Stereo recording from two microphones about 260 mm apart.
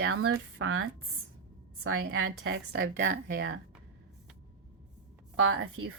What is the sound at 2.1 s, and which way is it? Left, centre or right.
A woman's voice, right.